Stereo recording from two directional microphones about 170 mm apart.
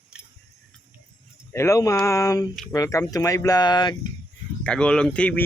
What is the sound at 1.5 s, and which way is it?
Speech, 15° left (ahead or behind).